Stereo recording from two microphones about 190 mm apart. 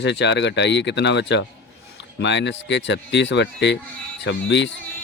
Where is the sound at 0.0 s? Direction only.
65° left (ahead or behind).